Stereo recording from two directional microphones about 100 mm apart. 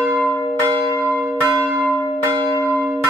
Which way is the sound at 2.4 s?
20° left (ahead or behind).